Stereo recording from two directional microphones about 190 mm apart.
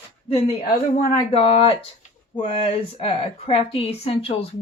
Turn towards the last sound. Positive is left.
turn(degrees=30)  # may be behind; listen again after turning